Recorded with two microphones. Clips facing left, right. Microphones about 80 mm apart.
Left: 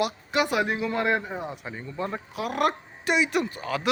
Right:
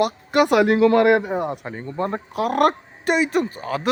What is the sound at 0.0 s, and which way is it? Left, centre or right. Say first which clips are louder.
A man's voice: right 7 dB; right.